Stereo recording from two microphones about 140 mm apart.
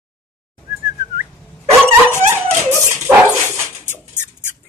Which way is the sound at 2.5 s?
15° right (ahead or behind).